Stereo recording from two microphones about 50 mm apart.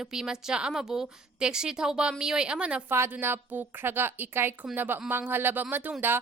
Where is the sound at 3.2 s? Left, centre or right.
Right.